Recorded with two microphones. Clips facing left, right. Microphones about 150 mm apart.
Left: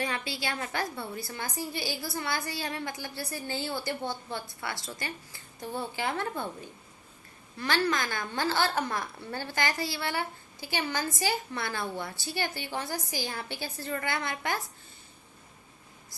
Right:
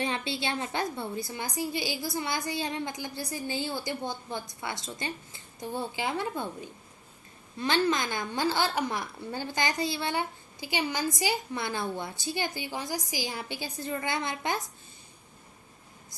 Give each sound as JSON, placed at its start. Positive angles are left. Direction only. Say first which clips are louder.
{"t": 0.0, "sound": "a woman's voice", "louder": "right 2 dB", "side_deg": -25}